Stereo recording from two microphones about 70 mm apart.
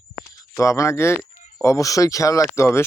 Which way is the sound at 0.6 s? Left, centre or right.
Left.